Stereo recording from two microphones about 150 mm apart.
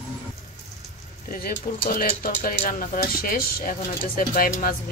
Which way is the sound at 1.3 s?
70° left (ahead or behind).